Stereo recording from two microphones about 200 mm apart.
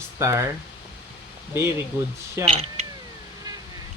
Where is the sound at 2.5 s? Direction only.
30° right (ahead or behind).